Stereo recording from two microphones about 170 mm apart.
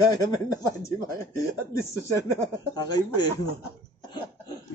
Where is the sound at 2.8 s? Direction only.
25° left (ahead or behind).